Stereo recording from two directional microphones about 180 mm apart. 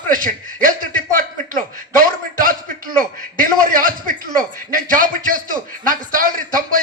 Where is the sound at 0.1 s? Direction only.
50° right (ahead or behind).